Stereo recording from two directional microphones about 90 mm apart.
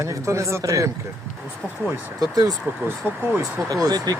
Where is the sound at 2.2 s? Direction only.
40° right (ahead or behind).